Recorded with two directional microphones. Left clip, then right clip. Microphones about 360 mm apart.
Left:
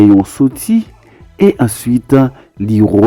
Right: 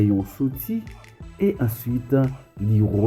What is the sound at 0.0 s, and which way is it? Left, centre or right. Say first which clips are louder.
Speech: left 15 dB; left.